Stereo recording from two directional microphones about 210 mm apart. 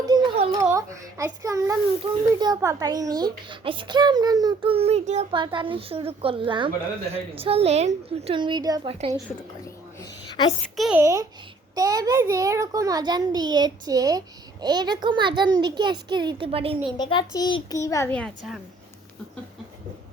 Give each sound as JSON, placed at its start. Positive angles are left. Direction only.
{"t": 0.0, "sound": "a sound", "side_deg": -20}
{"t": 2.3, "sound": "a child's voice", "side_deg": -15}
{"t": 10.0, "sound": "a sound", "side_deg": 20}
{"t": 10.8, "sound": "speech", "side_deg": 0}
{"t": 11.0, "sound": "a child's voice", "side_deg": -15}
{"t": 17.0, "sound": "a child's voice", "side_deg": 20}